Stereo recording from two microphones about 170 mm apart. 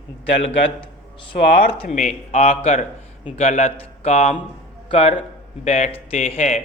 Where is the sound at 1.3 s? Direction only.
55° left (ahead or behind).